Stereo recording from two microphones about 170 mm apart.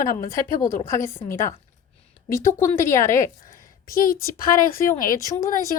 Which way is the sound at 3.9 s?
60° left (ahead or behind).